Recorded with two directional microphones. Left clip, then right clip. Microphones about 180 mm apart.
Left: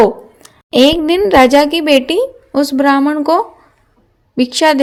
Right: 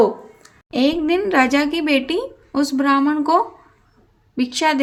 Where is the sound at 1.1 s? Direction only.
30° left (ahead or behind).